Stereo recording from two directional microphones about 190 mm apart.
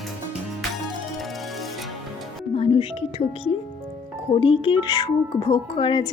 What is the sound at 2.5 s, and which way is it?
Speech, 30° left (ahead or behind).